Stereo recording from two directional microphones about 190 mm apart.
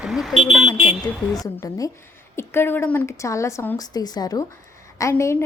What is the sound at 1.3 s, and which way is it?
A woman's voice, 20° left (ahead or behind).